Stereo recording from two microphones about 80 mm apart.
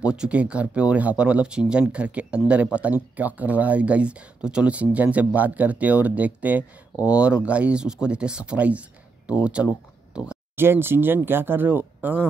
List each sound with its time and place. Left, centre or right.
0.0 s speech: centre
10.1 s a sound: centre
10.5 s speech: right